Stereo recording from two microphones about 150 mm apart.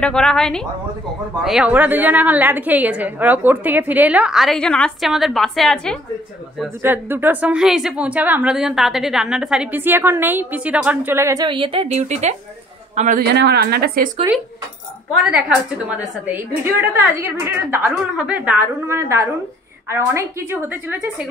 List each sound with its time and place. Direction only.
0.0 s a woman's voice: 5° left (ahead or behind)
6.8 s a woman's voice: 15° right (ahead or behind)
11.4 s a man's voice: 35° right (ahead or behind); by 13.2 s 55° right (ahead or behind)
13.3 s a woman's voice: 90° right
15.2 s a woman's voice: 10° right (ahead or behind)